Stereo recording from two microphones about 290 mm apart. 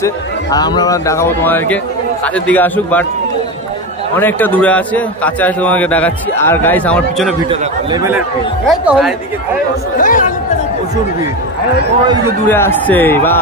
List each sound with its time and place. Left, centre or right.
0.0 s a man's voice: centre
4.2 s a man's voice: centre
7.4 s speech: centre
8.6 s a man's voice: centre
9.9 s speech: left
12.4 s a man's voice: centre